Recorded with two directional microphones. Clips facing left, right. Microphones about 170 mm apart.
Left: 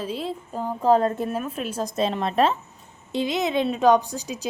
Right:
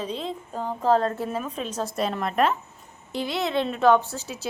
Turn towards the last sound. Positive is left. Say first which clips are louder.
# left 2 dB
turn(degrees=15)  # may be behind; listen again after turning